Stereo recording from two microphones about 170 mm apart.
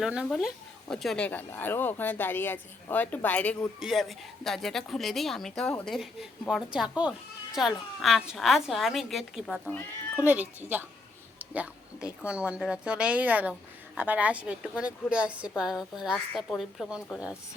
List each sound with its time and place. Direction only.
0.0 s a woman's voice: 5° right (ahead or behind)
10.2 s speech: 10° right (ahead or behind)